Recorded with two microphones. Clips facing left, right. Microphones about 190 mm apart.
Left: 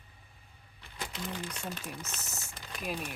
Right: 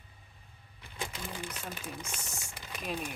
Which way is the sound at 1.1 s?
10° right (ahead or behind).